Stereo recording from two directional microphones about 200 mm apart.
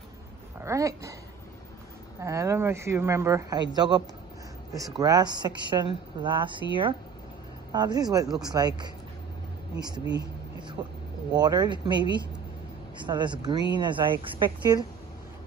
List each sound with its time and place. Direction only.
0.6 s speech: 15° right (ahead or behind)
2.2 s speech: 15° right (ahead or behind)
7.7 s speech: 20° right (ahead or behind)